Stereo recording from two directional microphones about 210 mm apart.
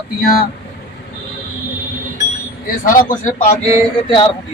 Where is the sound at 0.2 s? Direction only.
45° left (ahead or behind).